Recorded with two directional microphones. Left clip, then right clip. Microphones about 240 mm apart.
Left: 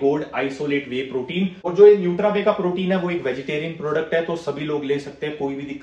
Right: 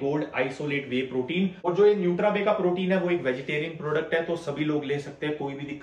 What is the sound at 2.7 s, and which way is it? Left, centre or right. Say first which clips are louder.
A man's voice: left 3 dB; centre.